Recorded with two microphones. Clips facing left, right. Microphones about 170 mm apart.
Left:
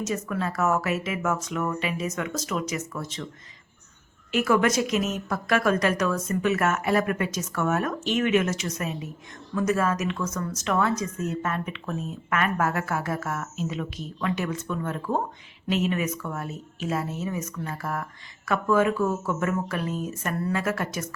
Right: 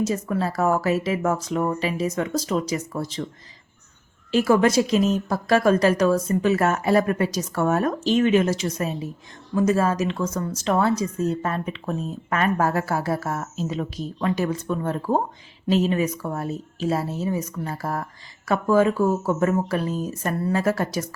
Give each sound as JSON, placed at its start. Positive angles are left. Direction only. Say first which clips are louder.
{"t": 0.0, "sound": "speech", "louder": "right 5 dB", "side_deg": -30}
{"t": 4.3, "sound": "speech", "louder": "right 4 dB", "side_deg": -30}